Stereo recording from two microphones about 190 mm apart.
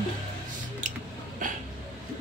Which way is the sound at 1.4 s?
45° right (ahead or behind).